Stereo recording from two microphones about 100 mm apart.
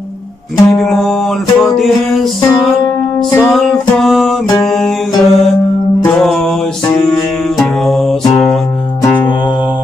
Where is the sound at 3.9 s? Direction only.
5° left (ahead or behind).